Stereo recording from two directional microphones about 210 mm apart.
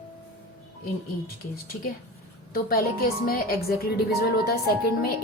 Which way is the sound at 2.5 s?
45° left (ahead or behind).